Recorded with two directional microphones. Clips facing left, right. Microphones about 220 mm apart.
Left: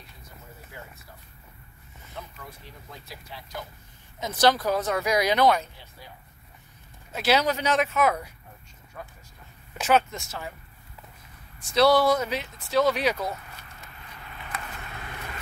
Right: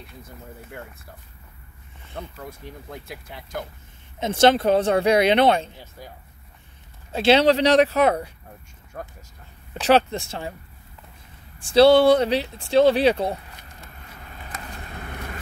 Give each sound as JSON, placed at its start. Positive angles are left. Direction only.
{"t": 0.7, "sound": "speech", "side_deg": -60}
{"t": 2.2, "sound": "speech", "side_deg": -60}
{"t": 4.2, "sound": "speech", "side_deg": -25}
{"t": 7.1, "sound": "speech", "side_deg": -30}
{"t": 9.0, "sound": "speech", "side_deg": -45}
{"t": 9.8, "sound": "speech", "side_deg": -35}
{"t": 11.6, "sound": "speech", "side_deg": -30}
{"t": 13.7, "sound": "vehicle", "side_deg": -45}
{"t": 15.0, "sound": "vehicle", "side_deg": -50}